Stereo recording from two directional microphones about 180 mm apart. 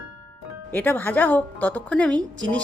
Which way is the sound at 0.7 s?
10° left (ahead or behind).